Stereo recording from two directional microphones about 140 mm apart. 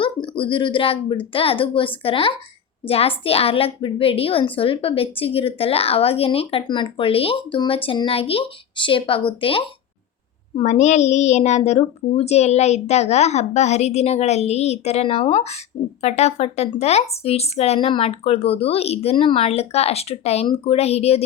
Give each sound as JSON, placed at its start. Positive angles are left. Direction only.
{"t": 0.0, "sound": "speech", "side_deg": 40}
{"t": 10.6, "sound": "speech", "side_deg": 55}